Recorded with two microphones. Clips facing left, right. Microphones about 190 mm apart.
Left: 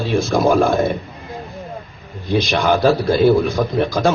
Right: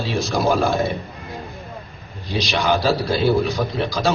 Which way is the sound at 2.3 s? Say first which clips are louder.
Left 4 dB; 50° left (ahead or behind).